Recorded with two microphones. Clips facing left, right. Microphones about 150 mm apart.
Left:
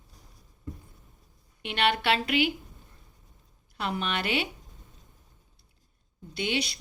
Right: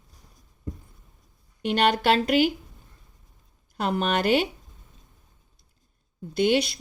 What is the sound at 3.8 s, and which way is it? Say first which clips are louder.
Speech: right 6 dB; 45° right (ahead or behind).